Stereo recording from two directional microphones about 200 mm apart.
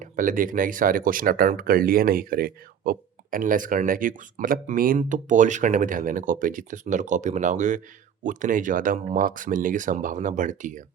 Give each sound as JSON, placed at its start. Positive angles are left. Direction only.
{"t": 0.0, "sound": "speech", "side_deg": -40}